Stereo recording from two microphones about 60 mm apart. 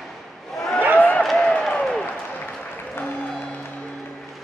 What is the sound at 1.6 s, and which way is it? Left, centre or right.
Applause, centre.